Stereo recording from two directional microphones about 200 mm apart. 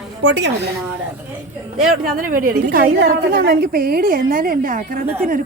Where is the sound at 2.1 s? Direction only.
45° right (ahead or behind).